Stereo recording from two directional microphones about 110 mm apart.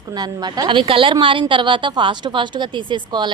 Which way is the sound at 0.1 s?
40° right (ahead or behind).